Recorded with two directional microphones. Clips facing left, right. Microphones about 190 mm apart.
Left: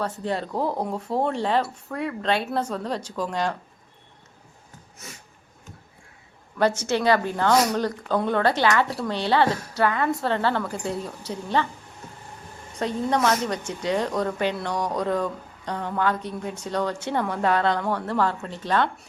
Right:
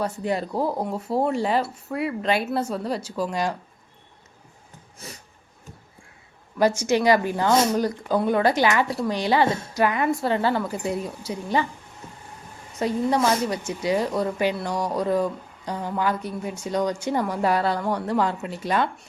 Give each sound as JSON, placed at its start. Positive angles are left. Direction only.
{"t": 0.0, "sound": "a woman's voice", "side_deg": -10}
{"t": 5.0, "sound": "a sound", "side_deg": -30}
{"t": 6.6, "sound": "a woman's voice", "side_deg": -10}
{"t": 7.5, "sound": "speech", "side_deg": -25}
{"t": 7.8, "sound": "a woman's voice", "side_deg": -10}
{"t": 9.5, "sound": "a woman's voice", "side_deg": -25}
{"t": 9.7, "sound": "a woman's voice", "side_deg": -15}
{"t": 12.8, "sound": "a woman's voice", "side_deg": -10}